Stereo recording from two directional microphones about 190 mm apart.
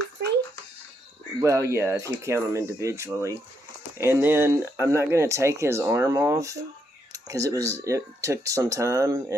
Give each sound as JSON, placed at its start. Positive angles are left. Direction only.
{"t": 1.4, "sound": "speech", "side_deg": -15}